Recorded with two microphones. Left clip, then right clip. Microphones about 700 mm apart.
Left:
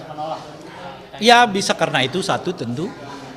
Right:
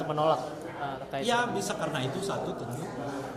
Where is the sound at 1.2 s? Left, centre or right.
Left.